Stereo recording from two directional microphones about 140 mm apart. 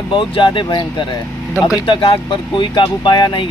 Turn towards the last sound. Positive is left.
turn(degrees=30)  # may be behind; listen again after turning